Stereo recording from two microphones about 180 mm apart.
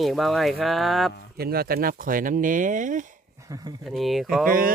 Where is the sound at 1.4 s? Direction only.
55° right (ahead or behind).